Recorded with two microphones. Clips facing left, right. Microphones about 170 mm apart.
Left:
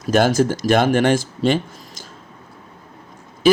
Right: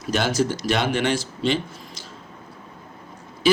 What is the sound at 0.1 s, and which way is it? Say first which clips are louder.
Speech: left 6 dB; 50° left (ahead or behind).